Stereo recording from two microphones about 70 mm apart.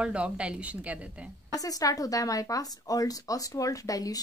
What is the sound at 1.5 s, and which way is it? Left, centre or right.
Speech, left.